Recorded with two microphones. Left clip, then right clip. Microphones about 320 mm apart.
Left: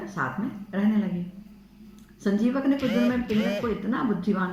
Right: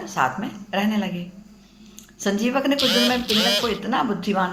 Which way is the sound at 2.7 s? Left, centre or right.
Right.